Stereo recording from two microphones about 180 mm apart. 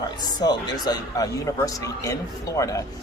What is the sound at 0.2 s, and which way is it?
Speech, 25° left (ahead or behind).